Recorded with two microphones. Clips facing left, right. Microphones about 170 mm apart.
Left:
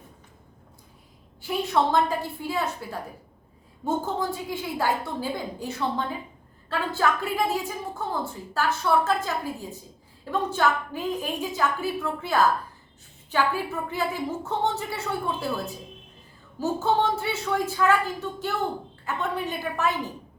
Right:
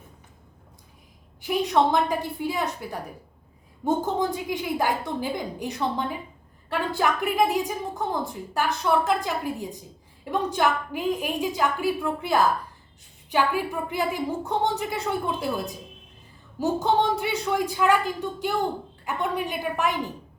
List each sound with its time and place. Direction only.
1.4 s a woman's voice: 15° right (ahead or behind)